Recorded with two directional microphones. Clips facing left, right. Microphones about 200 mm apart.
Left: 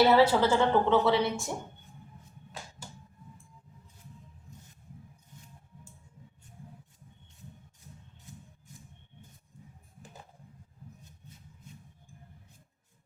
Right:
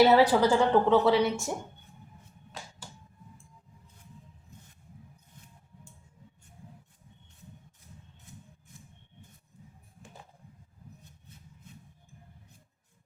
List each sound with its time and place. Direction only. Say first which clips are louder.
0.0 s a woman's voice: right 1 dB; 15° right (ahead or behind)